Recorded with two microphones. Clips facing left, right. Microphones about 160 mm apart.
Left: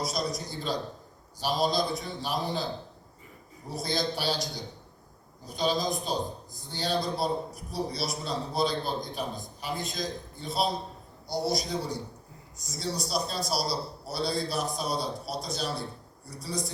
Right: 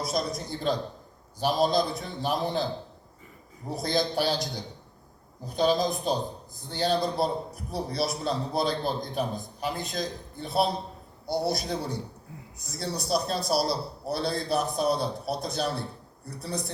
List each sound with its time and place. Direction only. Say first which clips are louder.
0.0 s a man's voice: right 2 dB; 55° right (ahead or behind)
3.8 s a man's voice: right 4 dB; 50° right (ahead or behind)
5.5 s a man's voice: right 4 dB; 55° right (ahead or behind)